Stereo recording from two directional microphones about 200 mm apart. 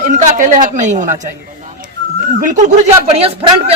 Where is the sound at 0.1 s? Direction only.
40° right (ahead or behind).